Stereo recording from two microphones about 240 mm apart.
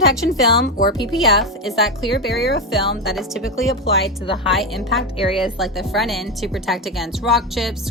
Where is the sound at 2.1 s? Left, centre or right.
Left.